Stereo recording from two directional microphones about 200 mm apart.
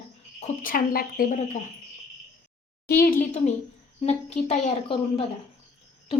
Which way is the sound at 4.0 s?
35° left (ahead or behind).